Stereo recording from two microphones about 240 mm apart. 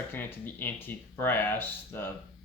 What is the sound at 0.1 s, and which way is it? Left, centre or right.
Speech, centre.